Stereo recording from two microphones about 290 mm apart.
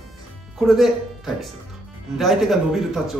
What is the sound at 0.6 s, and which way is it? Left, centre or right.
Speech, centre.